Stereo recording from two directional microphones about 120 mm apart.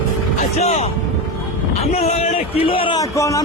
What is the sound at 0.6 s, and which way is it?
A man's voice, 65° left (ahead or behind).